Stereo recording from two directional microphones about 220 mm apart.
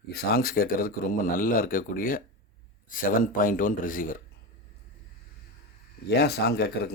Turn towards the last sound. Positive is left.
turn(degrees=45)  # may be behind; listen again after turning